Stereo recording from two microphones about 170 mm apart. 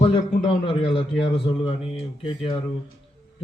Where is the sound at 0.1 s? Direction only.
30° left (ahead or behind).